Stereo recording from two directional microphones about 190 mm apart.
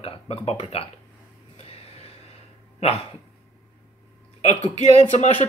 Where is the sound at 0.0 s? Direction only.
30° left (ahead or behind).